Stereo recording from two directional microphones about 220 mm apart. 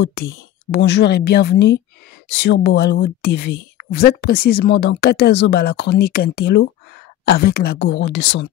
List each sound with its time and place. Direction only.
0.7 s a woman's voice: 50° left (ahead or behind)